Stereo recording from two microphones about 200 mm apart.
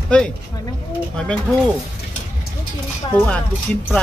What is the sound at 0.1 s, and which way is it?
Speech, 5° left (ahead or behind).